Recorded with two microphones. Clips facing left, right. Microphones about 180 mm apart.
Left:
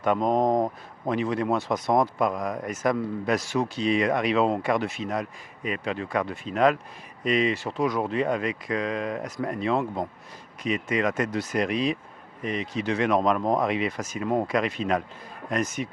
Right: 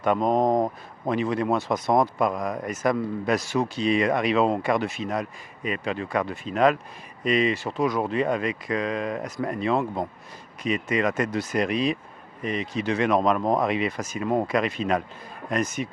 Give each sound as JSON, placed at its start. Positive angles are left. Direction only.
{"t": 0.0, "sound": "speech", "side_deg": -25}
{"t": 1.1, "sound": "speech", "side_deg": -15}
{"t": 1.5, "sound": "a man's voice", "side_deg": -30}
{"t": 7.8, "sound": "a man's voice", "side_deg": -25}
{"t": 8.1, "sound": "speech", "side_deg": -15}
{"t": 13.4, "sound": "a man's voice", "side_deg": -30}
{"t": 13.7, "sound": "speech", "side_deg": -15}
{"t": 14.0, "sound": "speech", "side_deg": -30}
{"t": 14.4, "sound": "speech", "side_deg": -15}